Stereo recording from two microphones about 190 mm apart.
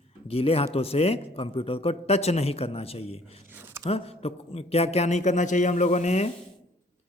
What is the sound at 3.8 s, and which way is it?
A man's voice, 30° left (ahead or behind).